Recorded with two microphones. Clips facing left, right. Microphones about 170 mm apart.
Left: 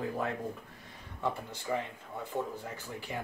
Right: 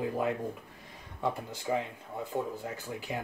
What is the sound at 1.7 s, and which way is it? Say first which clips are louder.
Speech: right 3 dB; 20° right (ahead or behind).